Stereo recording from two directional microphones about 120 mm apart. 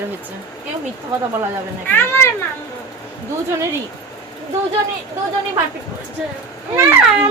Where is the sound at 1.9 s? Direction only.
20° left (ahead or behind).